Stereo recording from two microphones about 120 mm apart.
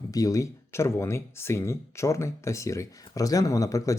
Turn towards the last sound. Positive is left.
turn(degrees=25)  # may be behind; listen again after turning